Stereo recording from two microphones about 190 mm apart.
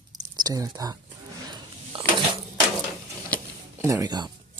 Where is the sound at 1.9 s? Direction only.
30° right (ahead or behind).